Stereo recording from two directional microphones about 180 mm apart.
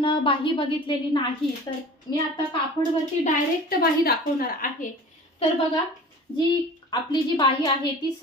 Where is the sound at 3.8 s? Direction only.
55° left (ahead or behind).